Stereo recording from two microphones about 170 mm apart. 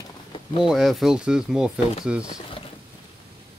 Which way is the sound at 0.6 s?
Centre (ahead or behind).